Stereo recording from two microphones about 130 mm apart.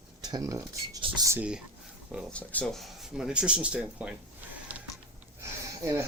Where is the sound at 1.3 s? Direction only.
10° right (ahead or behind).